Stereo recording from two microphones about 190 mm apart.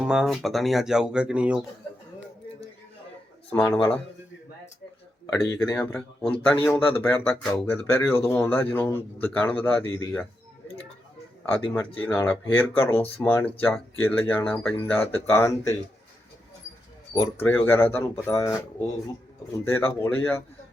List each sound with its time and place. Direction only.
0.0 s speech: 5° right (ahead or behind)
3.5 s speech: 15° left (ahead or behind)
5.2 s a man's voice: 20° left (ahead or behind)
11.9 s speech: 10° left (ahead or behind)
17.3 s speech: 10° left (ahead or behind)